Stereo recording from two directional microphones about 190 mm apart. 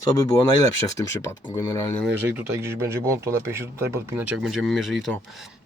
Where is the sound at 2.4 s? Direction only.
15° right (ahead or behind).